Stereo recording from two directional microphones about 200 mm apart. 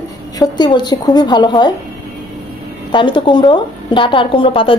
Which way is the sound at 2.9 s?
25° left (ahead or behind).